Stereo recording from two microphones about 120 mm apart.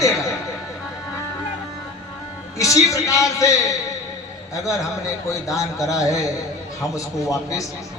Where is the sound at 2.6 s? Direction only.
25° left (ahead or behind).